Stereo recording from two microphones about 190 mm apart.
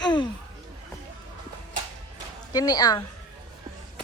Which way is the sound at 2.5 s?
20° left (ahead or behind).